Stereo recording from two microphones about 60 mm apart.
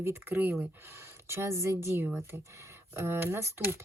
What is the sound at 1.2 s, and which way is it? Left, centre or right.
Speech, right.